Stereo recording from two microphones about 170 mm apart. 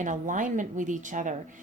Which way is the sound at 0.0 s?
50° right (ahead or behind).